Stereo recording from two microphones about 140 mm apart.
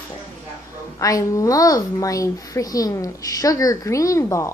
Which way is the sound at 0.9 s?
25° left (ahead or behind).